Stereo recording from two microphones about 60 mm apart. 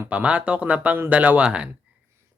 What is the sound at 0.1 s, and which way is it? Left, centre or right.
Speech, right.